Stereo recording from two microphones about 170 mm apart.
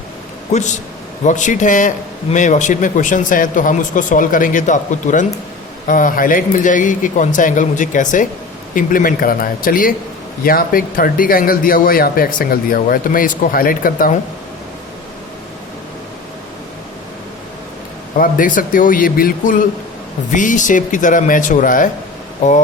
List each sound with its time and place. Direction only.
0.5 s speech: 45° left (ahead or behind)
18.2 s speech: 55° left (ahead or behind)